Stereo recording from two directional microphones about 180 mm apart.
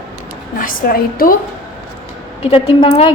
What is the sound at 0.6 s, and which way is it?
Speech, 50° left (ahead or behind).